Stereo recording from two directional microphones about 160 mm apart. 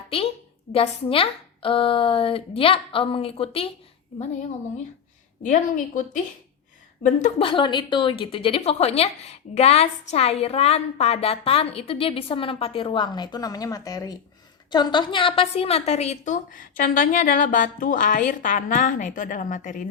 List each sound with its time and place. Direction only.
0.1 s a woman's voice: 35° left (ahead or behind)
7.4 s a woman's voice: 30° left (ahead or behind); by 19.9 s 55° left (ahead or behind)